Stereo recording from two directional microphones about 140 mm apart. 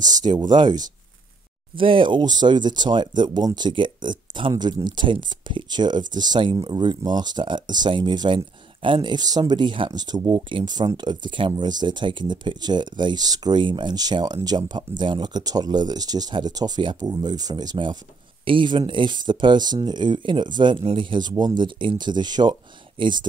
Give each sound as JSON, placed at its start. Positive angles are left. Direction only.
{"t": 0.0, "sound": "speech", "side_deg": -30}